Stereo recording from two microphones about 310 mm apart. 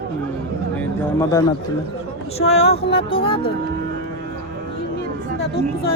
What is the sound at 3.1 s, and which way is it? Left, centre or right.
Speech, centre.